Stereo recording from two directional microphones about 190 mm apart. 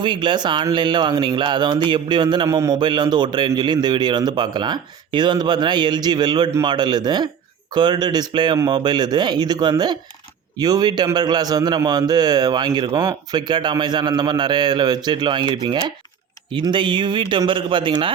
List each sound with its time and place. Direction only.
0.0 s speech: 25° right (ahead or behind)
16.5 s speech: 25° right (ahead or behind)